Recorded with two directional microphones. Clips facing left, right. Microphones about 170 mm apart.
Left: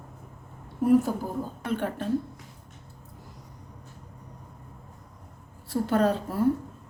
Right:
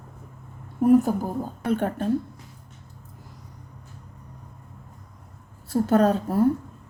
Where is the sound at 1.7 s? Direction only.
45° right (ahead or behind).